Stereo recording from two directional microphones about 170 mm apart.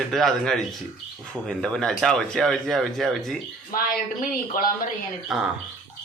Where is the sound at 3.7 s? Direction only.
55° left (ahead or behind).